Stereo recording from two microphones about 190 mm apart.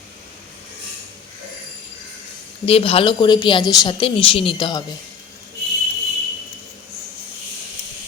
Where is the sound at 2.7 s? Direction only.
30° left (ahead or behind).